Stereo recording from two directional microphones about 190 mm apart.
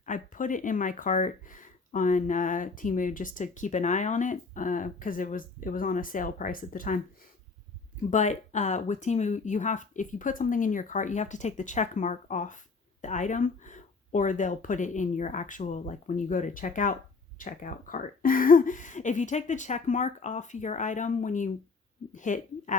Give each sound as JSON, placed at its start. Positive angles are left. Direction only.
{"t": 0.0, "sound": "speech", "side_deg": 45}
{"t": 8.1, "sound": "speech", "side_deg": 40}